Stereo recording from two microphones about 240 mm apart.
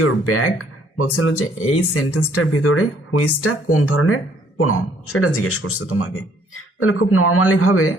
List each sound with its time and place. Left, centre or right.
0.0 s speech: left